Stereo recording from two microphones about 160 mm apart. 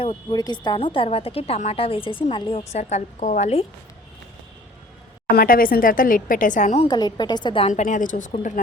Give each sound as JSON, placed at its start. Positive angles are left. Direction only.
{"t": 0.0, "sound": "speech", "side_deg": 30}
{"t": 5.4, "sound": "a woman's voice", "side_deg": 60}
{"t": 6.8, "sound": "a woman's voice", "side_deg": 25}
{"t": 7.7, "sound": "a woman's voice", "side_deg": 50}